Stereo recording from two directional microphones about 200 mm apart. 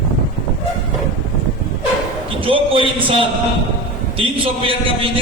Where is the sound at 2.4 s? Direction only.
25° right (ahead or behind).